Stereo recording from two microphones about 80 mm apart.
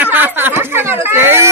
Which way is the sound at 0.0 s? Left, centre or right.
Right.